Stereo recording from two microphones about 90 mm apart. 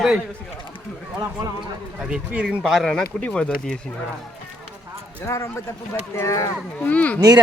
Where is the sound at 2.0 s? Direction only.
10° right (ahead or behind).